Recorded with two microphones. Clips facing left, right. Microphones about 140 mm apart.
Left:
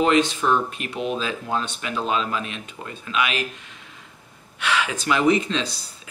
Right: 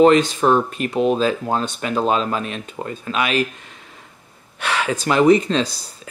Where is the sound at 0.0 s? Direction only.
40° right (ahead or behind).